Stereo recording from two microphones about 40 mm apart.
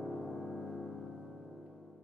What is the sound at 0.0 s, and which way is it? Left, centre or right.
Gong, centre.